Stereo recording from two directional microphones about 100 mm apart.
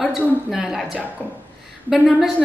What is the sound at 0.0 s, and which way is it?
A woman's voice, centre (ahead or behind).